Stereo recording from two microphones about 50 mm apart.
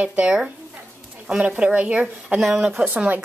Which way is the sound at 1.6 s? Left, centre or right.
Right.